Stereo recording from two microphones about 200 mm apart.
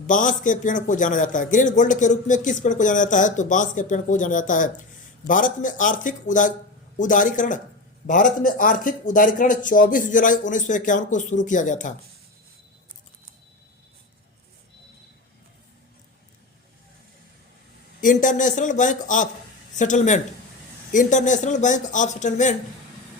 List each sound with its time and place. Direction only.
0.1 s a man's voice: 40° left (ahead or behind)
18.0 s a man's voice: 40° left (ahead or behind)